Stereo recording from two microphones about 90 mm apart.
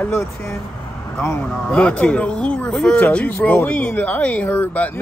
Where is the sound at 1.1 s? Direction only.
25° left (ahead or behind).